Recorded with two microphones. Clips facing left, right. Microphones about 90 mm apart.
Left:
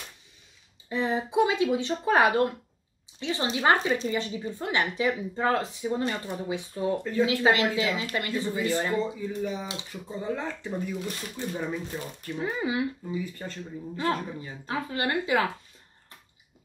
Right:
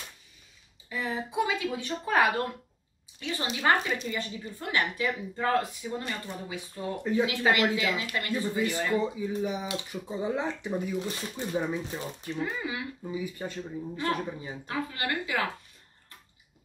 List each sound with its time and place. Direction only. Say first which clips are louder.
0.8 s speech: left 5 dB; 25° left (ahead or behind)
7.0 s speech: right 2 dB; 15° right (ahead or behind)
7.2 s speech: left 4 dB; 20° left (ahead or behind)
8.9 s speech: right 1 dB; 10° right (ahead or behind)
12.4 s speech: left 5 dB; 20° left (ahead or behind)
13.1 s speech: even; 10° right (ahead or behind)
14.7 s speech: left 3 dB; 25° left (ahead or behind)